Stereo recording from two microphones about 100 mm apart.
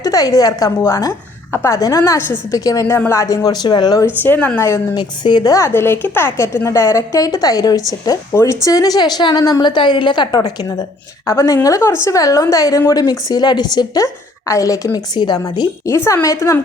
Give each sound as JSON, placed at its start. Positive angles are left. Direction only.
{"t": 0.0, "sound": "a woman's voice", "side_deg": 40}
{"t": 4.0, "sound": "speech", "side_deg": 20}
{"t": 4.6, "sound": "speech", "side_deg": 30}
{"t": 4.9, "sound": "a woman's voice", "side_deg": 45}
{"t": 5.7, "sound": "a woman's voice", "side_deg": 25}
{"t": 16.2, "sound": "a woman's voice", "side_deg": 35}